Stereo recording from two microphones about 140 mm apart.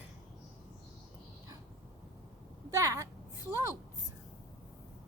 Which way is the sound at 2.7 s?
25° right (ahead or behind).